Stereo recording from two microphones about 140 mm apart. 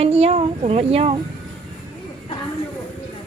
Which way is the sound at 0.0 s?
45° right (ahead or behind).